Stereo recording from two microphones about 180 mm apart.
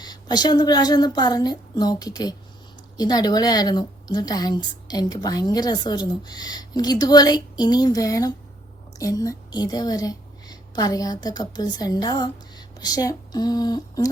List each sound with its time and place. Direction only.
0.0 s a woman's voice: 20° left (ahead or behind)